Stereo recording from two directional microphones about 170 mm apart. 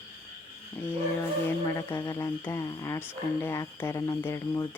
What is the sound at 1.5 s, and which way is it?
Speech, 15° left (ahead or behind).